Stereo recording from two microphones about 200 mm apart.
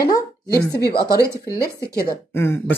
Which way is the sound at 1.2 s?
15° right (ahead or behind).